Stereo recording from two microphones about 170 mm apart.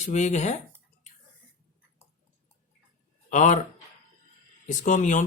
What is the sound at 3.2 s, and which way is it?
Speech, 45° left (ahead or behind).